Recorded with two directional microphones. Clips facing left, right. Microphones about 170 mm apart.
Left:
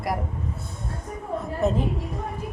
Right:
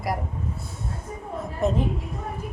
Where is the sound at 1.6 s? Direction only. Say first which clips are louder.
Even; centre (ahead or behind).